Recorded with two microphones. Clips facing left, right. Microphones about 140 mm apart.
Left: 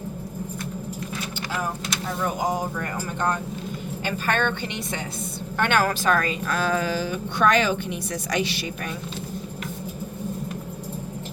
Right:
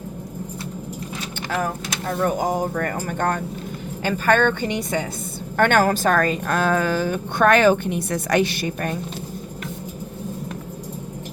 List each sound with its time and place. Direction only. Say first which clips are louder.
2.2 s a woman's voice: right 4 dB; 55° right (ahead or behind)